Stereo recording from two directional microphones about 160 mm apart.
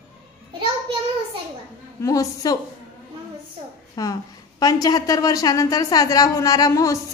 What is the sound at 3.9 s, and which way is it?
A woman's voice, 25° left (ahead or behind).